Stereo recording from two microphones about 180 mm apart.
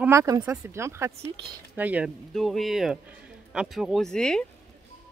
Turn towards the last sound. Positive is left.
turn(degrees=5)  # may be behind; listen again after turning